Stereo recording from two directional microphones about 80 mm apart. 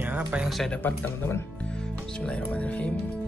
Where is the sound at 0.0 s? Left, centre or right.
Centre.